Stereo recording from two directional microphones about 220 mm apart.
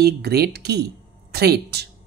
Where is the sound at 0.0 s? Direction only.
45° right (ahead or behind).